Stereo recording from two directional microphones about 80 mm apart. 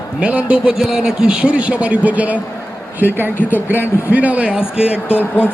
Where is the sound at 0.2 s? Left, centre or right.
Centre.